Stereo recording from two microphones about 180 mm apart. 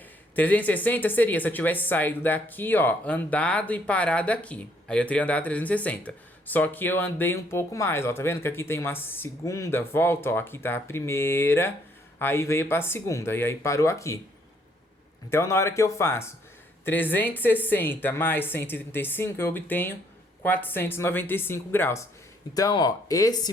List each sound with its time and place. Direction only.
0.3 s speech: 10° left (ahead or behind)
15.3 s speech: 15° left (ahead or behind)